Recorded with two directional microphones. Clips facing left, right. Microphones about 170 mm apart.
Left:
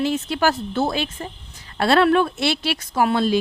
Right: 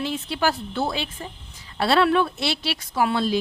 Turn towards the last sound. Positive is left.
turn(degrees=50)  # may be behind; listen again after turning